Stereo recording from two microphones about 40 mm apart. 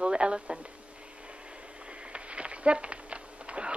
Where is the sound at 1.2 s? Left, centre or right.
Right.